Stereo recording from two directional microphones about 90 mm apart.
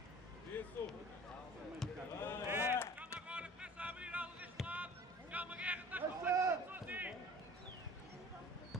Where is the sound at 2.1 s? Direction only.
25° left (ahead or behind).